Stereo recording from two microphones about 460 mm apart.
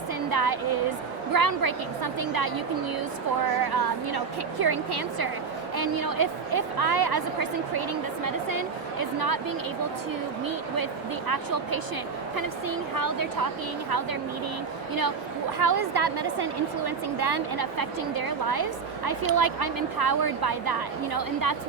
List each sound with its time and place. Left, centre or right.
0.3 s a woman's voice: right
3.6 s a woman's voice: right
11.3 s a woman's voice: right
15.5 s a woman's voice: right